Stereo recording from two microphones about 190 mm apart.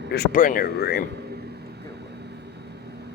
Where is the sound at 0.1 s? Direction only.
50° left (ahead or behind).